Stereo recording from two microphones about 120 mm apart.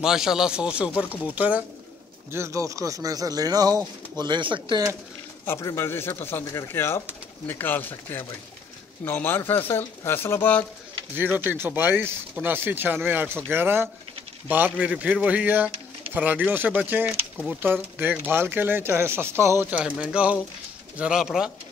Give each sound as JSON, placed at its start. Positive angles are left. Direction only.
{"t": 0.0, "sound": "speech", "side_deg": -5}
{"t": 2.3, "sound": "speech", "side_deg": -25}
{"t": 5.4, "sound": "speech", "side_deg": 20}
{"t": 11.5, "sound": "speech", "side_deg": -15}